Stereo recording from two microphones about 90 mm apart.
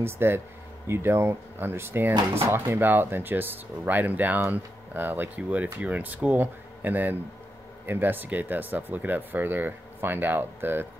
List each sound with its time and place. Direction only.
0.0 s speech: 25° right (ahead or behind)